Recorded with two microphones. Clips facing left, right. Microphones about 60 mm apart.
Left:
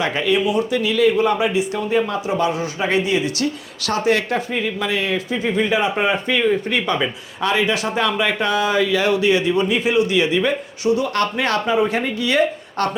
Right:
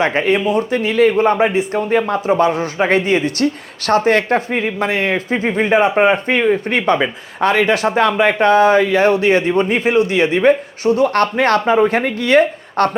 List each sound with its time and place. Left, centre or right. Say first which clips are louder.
0.0 s speech: right 3 dB; right